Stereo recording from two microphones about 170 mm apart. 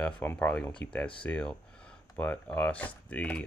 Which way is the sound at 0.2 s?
10° left (ahead or behind).